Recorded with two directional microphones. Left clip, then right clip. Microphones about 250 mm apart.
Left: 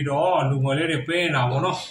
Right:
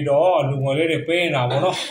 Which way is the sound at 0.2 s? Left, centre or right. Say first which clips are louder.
Right 4 dB; centre.